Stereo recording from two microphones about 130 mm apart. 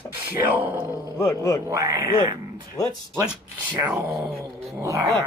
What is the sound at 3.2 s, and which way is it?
Speech, 10° right (ahead or behind).